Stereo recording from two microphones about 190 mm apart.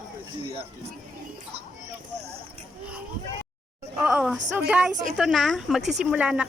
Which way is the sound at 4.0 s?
Centre (ahead or behind).